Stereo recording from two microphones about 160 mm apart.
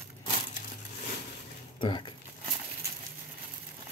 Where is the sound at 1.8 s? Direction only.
30° left (ahead or behind).